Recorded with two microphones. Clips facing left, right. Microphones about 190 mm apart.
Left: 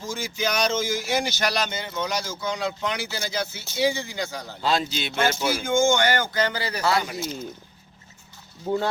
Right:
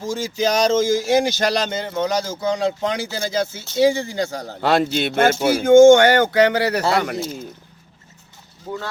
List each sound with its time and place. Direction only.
0.0 s speech: 40° right (ahead or behind)
0.3 s a sound: 40° right (ahead or behind)
1.5 s speech: 30° right (ahead or behind)
4.6 s speech: 60° right (ahead or behind)